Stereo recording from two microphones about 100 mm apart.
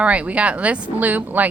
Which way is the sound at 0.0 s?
15° right (ahead or behind).